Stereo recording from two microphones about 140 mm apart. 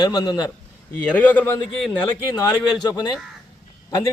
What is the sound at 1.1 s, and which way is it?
Speech, 10° left (ahead or behind).